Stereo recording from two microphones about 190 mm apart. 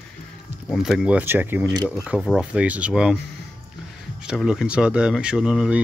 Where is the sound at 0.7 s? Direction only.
Centre (ahead or behind).